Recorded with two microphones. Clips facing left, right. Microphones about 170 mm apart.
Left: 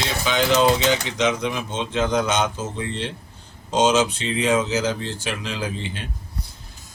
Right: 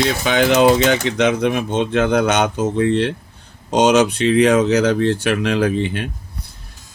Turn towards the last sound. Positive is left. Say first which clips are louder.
# right 10 dB
turn(degrees=-60)  # may be behind; listen again after turning